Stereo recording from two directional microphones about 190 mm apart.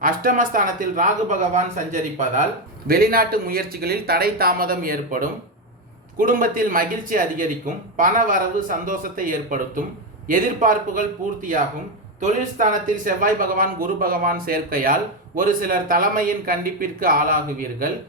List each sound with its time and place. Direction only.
0.0 s speech: 45° right (ahead or behind)
2.8 s speech: 50° right (ahead or behind)
12.2 s speech: 45° right (ahead or behind)